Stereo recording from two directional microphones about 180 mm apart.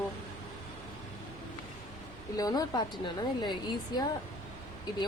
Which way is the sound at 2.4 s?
20° left (ahead or behind).